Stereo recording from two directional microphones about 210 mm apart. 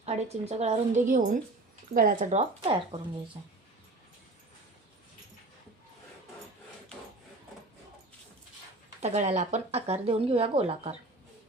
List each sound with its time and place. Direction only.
0.0 s speech: 30° right (ahead or behind)
9.0 s speech: 30° right (ahead or behind)